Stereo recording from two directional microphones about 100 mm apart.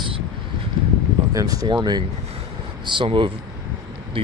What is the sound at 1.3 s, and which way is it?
Speech, 35° right (ahead or behind).